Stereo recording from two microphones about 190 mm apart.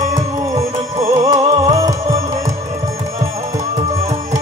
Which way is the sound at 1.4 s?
30° right (ahead or behind).